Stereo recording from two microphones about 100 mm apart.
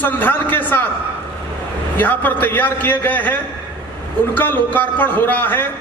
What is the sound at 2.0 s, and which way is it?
A woman's voice, 15° left (ahead or behind).